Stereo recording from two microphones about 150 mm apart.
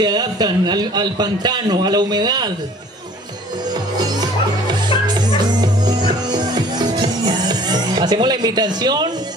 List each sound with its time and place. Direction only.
0.0 s a man's voice: 25° right (ahead or behind)
4.0 s music: 25° right (ahead or behind)